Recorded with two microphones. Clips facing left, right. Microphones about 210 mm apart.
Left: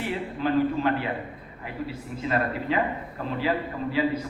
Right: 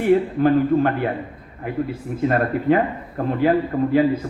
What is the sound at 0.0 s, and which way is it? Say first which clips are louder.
A man's voice: right 12 dB; 50° right (ahead or behind).